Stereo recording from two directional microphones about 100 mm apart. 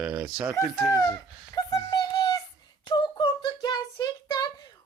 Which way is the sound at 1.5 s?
40° left (ahead or behind).